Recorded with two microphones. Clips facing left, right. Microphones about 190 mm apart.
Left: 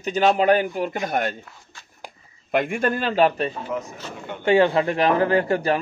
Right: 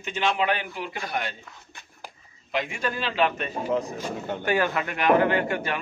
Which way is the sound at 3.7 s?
35° right (ahead or behind).